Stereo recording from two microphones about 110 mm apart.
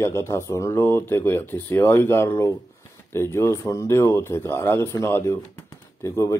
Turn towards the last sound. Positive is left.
turn(degrees=25)  # may be behind; listen again after turning